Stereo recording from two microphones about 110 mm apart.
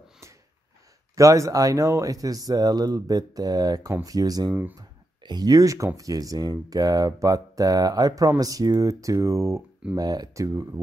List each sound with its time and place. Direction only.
1.1 s speech: 30° right (ahead or behind)